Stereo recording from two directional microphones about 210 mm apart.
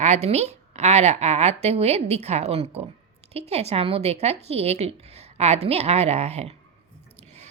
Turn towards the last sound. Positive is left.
turn(degrees=-30)  # may be behind; listen again after turning